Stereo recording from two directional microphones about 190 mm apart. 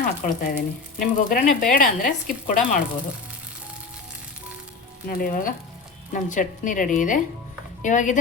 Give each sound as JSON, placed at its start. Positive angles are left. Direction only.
{"t": 0.0, "sound": "speech", "side_deg": 50}
{"t": 5.0, "sound": "speech", "side_deg": 50}